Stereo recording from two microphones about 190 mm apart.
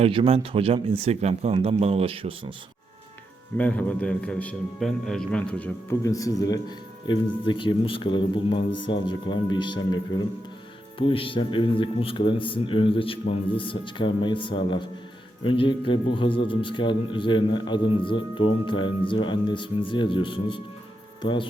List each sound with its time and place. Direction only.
0.0 s speech: 30° right (ahead or behind)
3.6 s a man's voice: 5° left (ahead or behind); by 21.4 s 25° left (ahead or behind)